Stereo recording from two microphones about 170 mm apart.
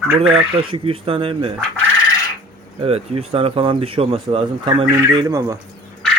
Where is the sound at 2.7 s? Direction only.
35° right (ahead or behind).